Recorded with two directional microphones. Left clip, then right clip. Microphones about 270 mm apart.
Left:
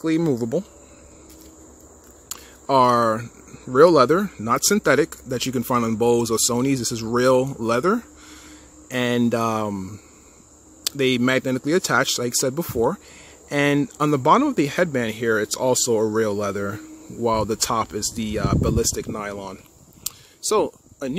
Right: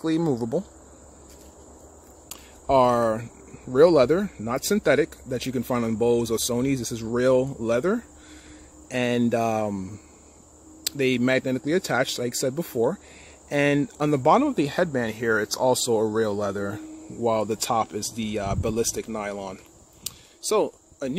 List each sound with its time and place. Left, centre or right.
0.0 s speech: centre
2.2 s a sound: centre
3.7 s speech: centre